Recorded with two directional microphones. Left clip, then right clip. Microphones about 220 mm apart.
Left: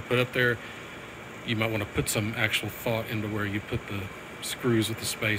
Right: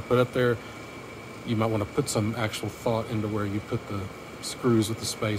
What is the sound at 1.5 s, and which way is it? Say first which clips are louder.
Speech: right 1 dB; 15° right (ahead or behind).